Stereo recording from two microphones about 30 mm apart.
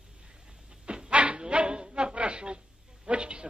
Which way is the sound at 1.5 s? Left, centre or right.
Right.